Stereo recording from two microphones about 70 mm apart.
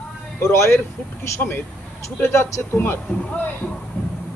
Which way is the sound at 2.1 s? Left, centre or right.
Left.